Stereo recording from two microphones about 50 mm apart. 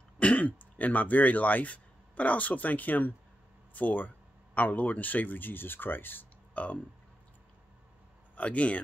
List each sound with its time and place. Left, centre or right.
0.2 s speech: left
8.4 s speech: left